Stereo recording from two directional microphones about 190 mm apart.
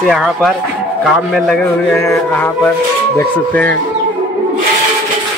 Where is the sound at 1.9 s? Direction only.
10° left (ahead or behind).